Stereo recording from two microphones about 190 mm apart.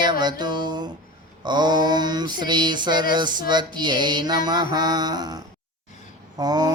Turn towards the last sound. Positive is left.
turn(degrees=-20)  # may be behind; listen again after turning